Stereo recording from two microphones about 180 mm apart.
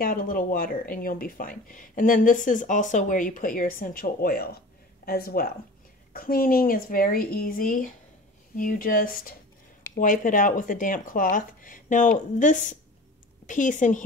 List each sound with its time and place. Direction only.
0.0 s speech: 50° left (ahead or behind)